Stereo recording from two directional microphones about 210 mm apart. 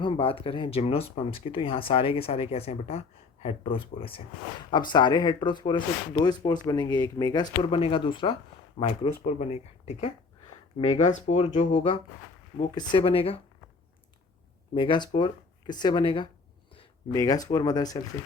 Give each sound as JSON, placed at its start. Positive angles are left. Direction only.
{"t": 0.0, "sound": "speech", "side_deg": 25}
{"t": 14.8, "sound": "speech", "side_deg": 20}